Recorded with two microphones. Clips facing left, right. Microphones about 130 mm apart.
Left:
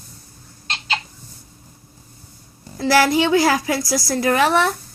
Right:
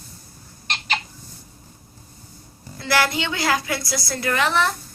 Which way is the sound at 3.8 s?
90° left.